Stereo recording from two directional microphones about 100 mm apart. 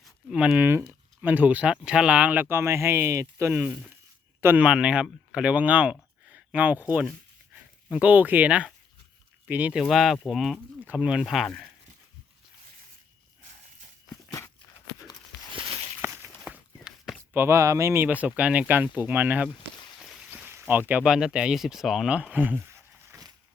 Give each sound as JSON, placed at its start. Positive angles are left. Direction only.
{"t": 0.3, "sound": "speech", "side_deg": -10}
{"t": 4.4, "sound": "a sound", "side_deg": -20}
{"t": 4.6, "sound": "speech", "side_deg": -10}
{"t": 9.8, "sound": "speech", "side_deg": 0}
{"t": 10.8, "sound": "speech", "side_deg": -10}
{"t": 15.5, "sound": "a sound", "side_deg": -60}
{"t": 16.0, "sound": "walk", "side_deg": -25}
{"t": 16.4, "sound": "walk", "side_deg": -5}
{"t": 17.3, "sound": "speech", "side_deg": -25}
{"t": 20.0, "sound": "a sound", "side_deg": 0}
{"t": 20.3, "sound": "boat", "side_deg": -20}
{"t": 21.0, "sound": "speech", "side_deg": -5}